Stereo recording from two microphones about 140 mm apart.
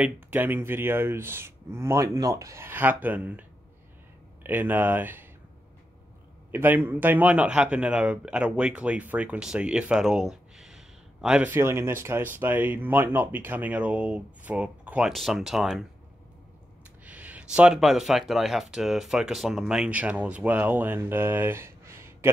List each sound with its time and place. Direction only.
0.0 s speech: 15° right (ahead or behind)
6.5 s speech: 15° right (ahead or behind)
11.5 s speech: 20° right (ahead or behind); by 15.8 s centre (ahead or behind)
17.0 s speech: 10° right (ahead or behind)